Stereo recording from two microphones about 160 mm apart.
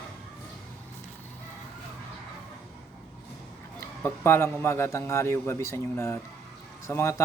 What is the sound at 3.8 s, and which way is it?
A man's voice, 15° left (ahead or behind).